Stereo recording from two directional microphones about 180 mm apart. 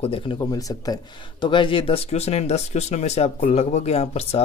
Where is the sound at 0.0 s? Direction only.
30° left (ahead or behind).